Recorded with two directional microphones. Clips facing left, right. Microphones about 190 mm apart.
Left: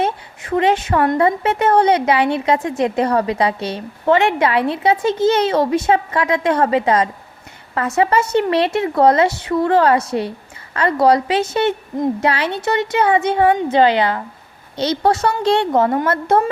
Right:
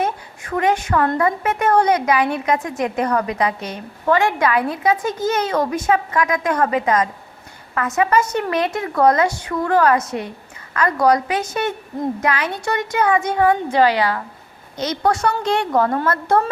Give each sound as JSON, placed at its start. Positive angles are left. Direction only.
{"t": 0.0, "sound": "a woman's voice", "side_deg": 25}